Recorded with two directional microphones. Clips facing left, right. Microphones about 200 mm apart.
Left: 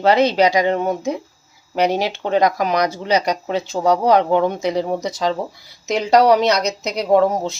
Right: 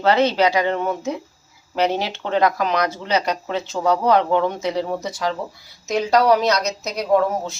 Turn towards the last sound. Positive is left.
turn(degrees=20)  # may be behind; listen again after turning